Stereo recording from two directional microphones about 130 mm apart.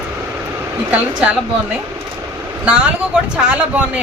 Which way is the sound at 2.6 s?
10° right (ahead or behind).